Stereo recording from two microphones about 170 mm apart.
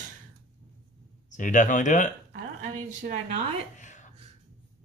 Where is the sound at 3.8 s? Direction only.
45° left (ahead or behind).